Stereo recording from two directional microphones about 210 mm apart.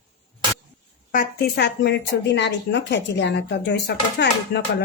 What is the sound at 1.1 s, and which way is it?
Speech, 50° left (ahead or behind).